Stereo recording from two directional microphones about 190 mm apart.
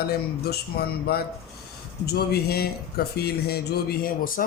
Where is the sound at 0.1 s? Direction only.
55° left (ahead or behind).